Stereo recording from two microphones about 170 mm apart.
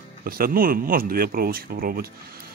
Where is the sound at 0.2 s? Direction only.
60° right (ahead or behind).